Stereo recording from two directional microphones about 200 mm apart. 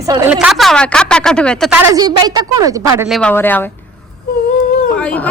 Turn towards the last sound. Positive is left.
turn(degrees=5)  # may be behind; listen again after turning